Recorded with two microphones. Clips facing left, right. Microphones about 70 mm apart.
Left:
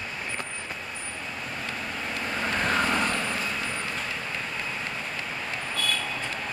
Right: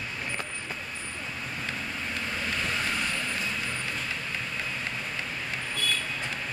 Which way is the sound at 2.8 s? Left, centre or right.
Left.